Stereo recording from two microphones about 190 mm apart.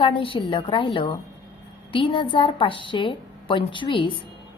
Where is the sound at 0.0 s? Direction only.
25° left (ahead or behind).